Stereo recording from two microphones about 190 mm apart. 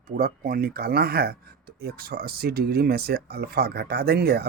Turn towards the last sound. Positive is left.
turn(degrees=-55)  # may be behind; listen again after turning